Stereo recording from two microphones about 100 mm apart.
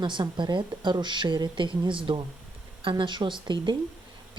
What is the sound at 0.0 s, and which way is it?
Speech, 50° right (ahead or behind).